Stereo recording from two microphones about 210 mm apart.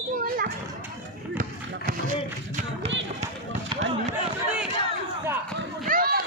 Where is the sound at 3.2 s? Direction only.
30° right (ahead or behind).